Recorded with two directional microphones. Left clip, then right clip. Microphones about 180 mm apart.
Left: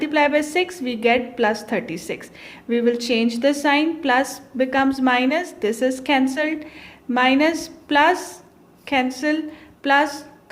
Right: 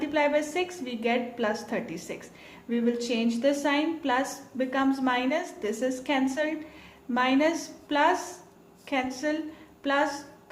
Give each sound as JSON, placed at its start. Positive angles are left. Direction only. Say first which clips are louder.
{"t": 0.0, "sound": "a woman's voice", "louder": "left 7 dB", "side_deg": 45}